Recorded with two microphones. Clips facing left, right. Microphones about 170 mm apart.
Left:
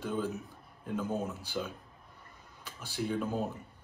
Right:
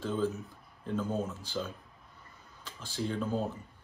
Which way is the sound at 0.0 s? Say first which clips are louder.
Right 2 dB; 15° left (ahead or behind).